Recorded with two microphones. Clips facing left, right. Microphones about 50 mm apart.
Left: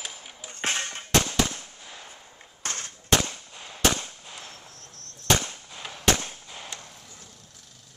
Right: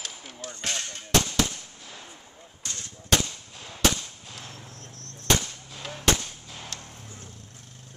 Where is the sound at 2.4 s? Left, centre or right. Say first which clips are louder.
Left 5 dB; left.